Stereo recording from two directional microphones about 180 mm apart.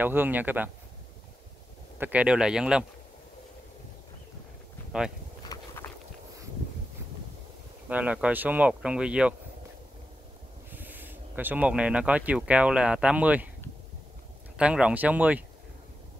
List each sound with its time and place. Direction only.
0.0 s speech: 10° right (ahead or behind)
2.0 s speech: 10° right (ahead or behind)
4.9 s speech: 5° right (ahead or behind)
5.5 s walk: 20° left (ahead or behind)
7.9 s speech: 5° right (ahead or behind)
10.7 s speech: 10° right (ahead or behind)
14.6 s speech: 5° right (ahead or behind)